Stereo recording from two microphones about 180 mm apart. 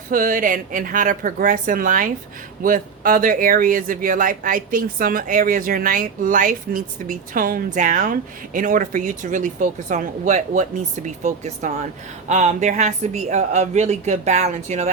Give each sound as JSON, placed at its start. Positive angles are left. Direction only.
{"t": 0.1, "sound": "speech", "side_deg": -50}